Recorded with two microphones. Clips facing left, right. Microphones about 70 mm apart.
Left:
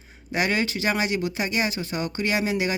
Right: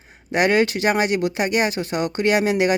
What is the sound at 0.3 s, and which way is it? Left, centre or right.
Speech, right.